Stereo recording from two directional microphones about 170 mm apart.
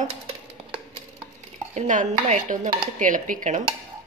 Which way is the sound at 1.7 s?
45° right (ahead or behind).